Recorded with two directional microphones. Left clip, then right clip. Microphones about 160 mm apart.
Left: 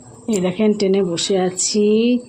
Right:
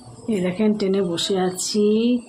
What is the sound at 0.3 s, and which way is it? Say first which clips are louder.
A woman's voice: left 4 dB; 25° left (ahead or behind).